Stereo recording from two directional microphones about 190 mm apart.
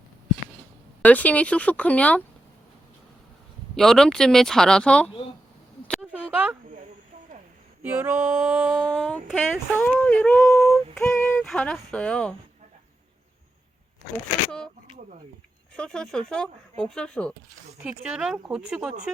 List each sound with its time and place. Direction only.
1.0 s speech: 10° left (ahead or behind)
3.8 s speech: centre (ahead or behind)
5.9 s a sound: 5° right (ahead or behind)
7.8 s female singing: 10° right (ahead or behind)
8.7 s speech: 5° left (ahead or behind)
11.1 s yodeling: 10° left (ahead or behind)
11.4 s speech: 5° left (ahead or behind)
14.8 s a sound: 40° right (ahead or behind)
15.7 s speech: 5° left (ahead or behind)
17.8 s speech: 5° right (ahead or behind)